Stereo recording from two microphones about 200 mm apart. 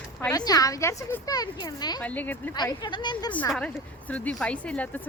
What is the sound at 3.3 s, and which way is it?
Speech, 5° left (ahead or behind).